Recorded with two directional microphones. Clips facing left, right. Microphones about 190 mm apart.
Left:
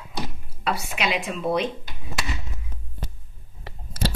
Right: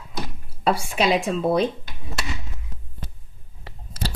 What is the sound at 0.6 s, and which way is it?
Speech, 35° right (ahead or behind).